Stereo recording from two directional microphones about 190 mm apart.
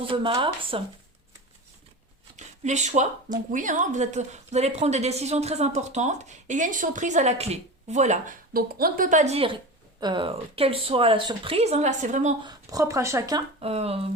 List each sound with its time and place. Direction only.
0.0 s a woman's voice: 30° right (ahead or behind)
2.3 s a woman's voice: 40° right (ahead or behind)
12.4 s speech: 20° right (ahead or behind)
13.6 s a woman's voice: 30° right (ahead or behind)